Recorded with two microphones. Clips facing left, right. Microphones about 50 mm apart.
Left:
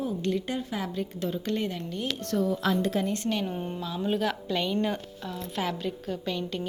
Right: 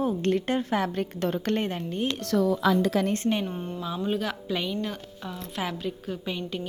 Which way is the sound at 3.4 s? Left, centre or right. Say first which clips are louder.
Even; centre.